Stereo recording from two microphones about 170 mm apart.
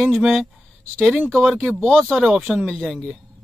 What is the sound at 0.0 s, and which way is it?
Speech, 5° right (ahead or behind).